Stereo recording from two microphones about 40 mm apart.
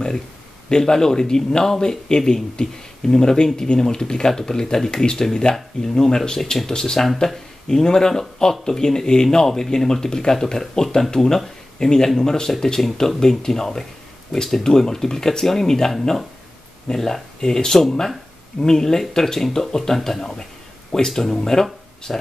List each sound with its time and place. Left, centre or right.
0.7 s a man's voice: centre